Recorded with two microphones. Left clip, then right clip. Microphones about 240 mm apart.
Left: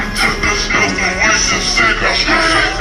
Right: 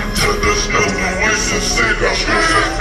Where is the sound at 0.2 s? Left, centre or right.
Right.